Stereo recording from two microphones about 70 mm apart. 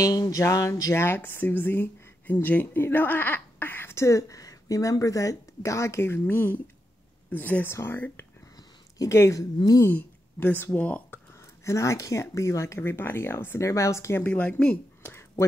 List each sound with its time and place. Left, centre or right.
0.0 s music: left
0.9 s speech: left
8.9 s speech: left
9.9 s speech: left
11.6 s speech: left
13.6 s speech: left
14.2 s speech: centre